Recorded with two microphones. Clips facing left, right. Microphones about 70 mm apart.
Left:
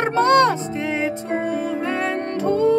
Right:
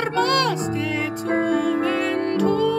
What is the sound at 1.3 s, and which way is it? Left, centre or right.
Music, right.